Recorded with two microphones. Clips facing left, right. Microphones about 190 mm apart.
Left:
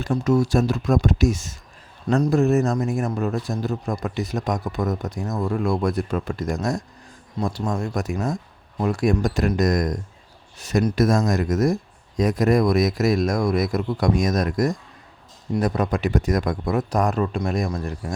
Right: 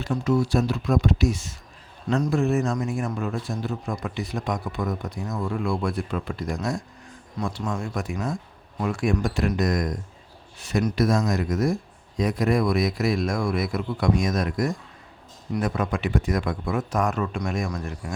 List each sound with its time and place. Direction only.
0.1 s a man's voice: 45° left (ahead or behind)
7.3 s a man's voice: 35° left (ahead or behind)